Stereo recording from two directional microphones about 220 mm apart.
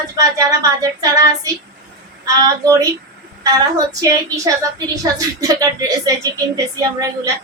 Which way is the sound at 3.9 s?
15° right (ahead or behind).